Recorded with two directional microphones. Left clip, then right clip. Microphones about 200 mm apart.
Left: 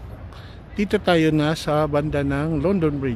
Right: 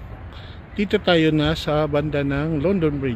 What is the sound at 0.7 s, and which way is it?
Speech, centre (ahead or behind).